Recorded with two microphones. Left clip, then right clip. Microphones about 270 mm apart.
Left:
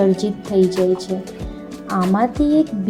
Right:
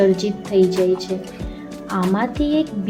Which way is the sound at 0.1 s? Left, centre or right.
Centre.